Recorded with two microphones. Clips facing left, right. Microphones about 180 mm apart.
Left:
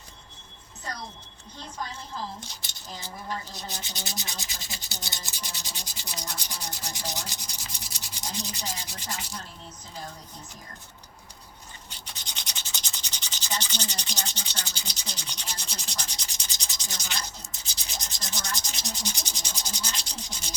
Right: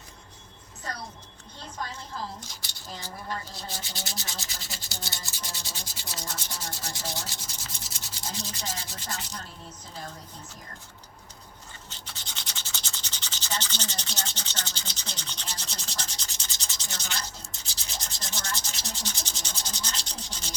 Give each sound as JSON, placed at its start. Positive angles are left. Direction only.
{"t": 2.6, "sound": "speech", "side_deg": 20}
{"t": 3.5, "sound": "rub", "side_deg": 20}
{"t": 11.9, "sound": "rub", "side_deg": 15}
{"t": 17.8, "sound": "sanding", "side_deg": 15}